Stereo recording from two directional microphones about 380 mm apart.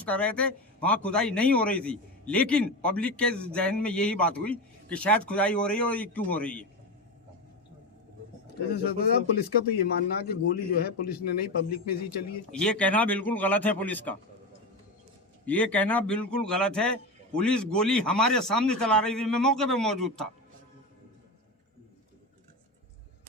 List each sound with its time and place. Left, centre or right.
0.0 s speech: centre
8.7 s a man's voice: left
12.5 s speech: centre
15.4 s speech: centre